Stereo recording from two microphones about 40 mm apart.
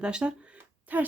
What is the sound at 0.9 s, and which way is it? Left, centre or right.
Speech, right.